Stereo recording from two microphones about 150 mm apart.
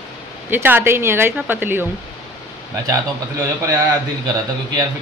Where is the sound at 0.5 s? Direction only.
15° right (ahead or behind).